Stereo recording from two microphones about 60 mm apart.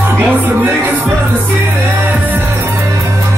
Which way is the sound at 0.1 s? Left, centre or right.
Right.